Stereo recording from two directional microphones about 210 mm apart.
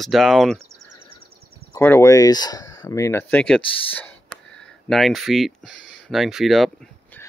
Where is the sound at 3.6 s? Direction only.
25° left (ahead or behind).